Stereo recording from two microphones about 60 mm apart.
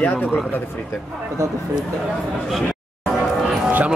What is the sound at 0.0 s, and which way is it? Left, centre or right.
Speech, left.